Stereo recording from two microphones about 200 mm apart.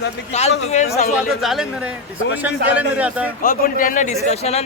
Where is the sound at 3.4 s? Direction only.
45° left (ahead or behind).